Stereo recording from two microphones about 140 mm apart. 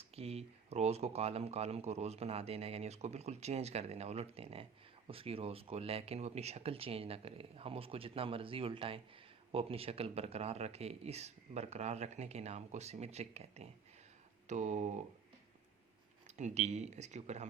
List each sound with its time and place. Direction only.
0.0 s speech: 45° right (ahead or behind)
14.4 s speech: 60° right (ahead or behind)
16.4 s speech: 55° right (ahead or behind)